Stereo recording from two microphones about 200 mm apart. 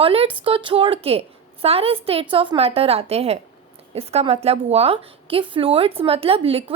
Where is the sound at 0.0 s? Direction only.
30° right (ahead or behind).